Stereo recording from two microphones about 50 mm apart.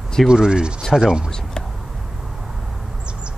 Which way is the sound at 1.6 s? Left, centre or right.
Centre.